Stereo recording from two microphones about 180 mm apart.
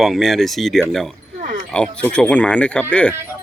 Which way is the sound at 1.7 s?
5° left (ahead or behind).